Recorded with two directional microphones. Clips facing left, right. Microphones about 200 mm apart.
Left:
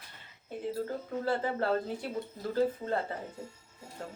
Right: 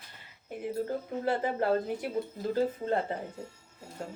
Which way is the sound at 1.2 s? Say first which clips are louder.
Right 2 dB; 20° right (ahead or behind).